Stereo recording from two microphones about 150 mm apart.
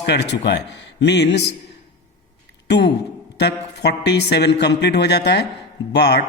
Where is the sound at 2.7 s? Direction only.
90° left.